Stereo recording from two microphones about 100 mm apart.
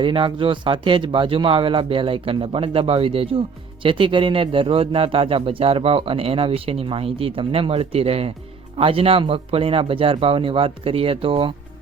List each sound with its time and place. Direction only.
0.0 s a man's voice: 55° right (ahead or behind); by 8.3 s 80° right
8.8 s speech: 65° right (ahead or behind)